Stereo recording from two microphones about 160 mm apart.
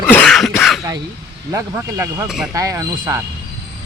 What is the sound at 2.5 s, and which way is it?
Speech, 20° right (ahead or behind).